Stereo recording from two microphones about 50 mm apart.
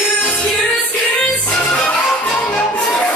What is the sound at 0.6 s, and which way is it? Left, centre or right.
Music, left.